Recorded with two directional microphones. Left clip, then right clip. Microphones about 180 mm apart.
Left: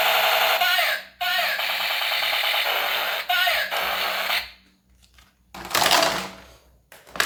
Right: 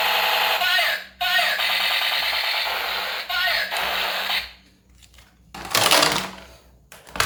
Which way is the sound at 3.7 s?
5° left (ahead or behind).